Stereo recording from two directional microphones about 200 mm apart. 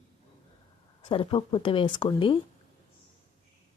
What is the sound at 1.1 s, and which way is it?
Speech, 25° left (ahead or behind).